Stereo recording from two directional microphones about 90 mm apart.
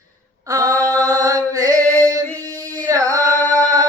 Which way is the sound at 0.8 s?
40° right (ahead or behind).